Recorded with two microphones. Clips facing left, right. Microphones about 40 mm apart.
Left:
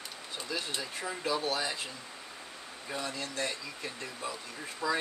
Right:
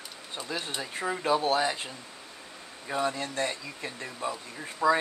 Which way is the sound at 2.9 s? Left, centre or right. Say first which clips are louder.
Right 7 dB; right.